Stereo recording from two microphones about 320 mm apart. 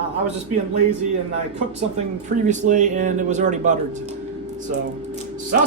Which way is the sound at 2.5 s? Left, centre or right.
Right.